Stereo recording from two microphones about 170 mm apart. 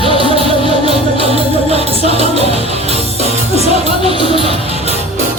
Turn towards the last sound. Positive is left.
turn(degrees=-35)  # may be behind; listen again after turning